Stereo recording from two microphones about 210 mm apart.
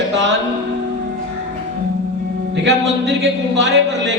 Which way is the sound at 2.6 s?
60° right (ahead or behind).